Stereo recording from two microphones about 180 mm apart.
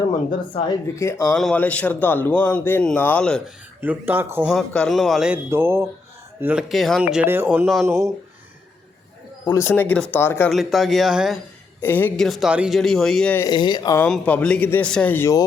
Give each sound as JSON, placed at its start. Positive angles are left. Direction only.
{"t": 0.9, "sound": "a man's voice", "side_deg": 15}
{"t": 3.8, "sound": "speech", "side_deg": -10}
{"t": 4.5, "sound": "a man's voice", "side_deg": 0}
{"t": 7.9, "sound": "speech", "side_deg": -15}
{"t": 9.5, "sound": "a man's voice", "side_deg": 15}
{"t": 10.5, "sound": "a man's voice", "side_deg": 0}
{"t": 11.8, "sound": "a man's voice", "side_deg": 10}
{"t": 13.4, "sound": "speech", "side_deg": 25}
{"t": 14.1, "sound": "a man's voice", "side_deg": 5}